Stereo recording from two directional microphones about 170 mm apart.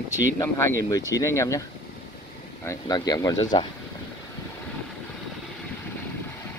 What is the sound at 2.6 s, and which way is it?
Speech, 20° left (ahead or behind).